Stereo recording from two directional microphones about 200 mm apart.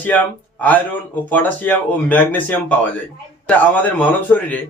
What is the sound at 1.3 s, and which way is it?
Speech, 10° left (ahead or behind).